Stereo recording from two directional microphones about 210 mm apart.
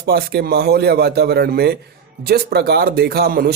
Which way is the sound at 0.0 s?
50° right (ahead or behind).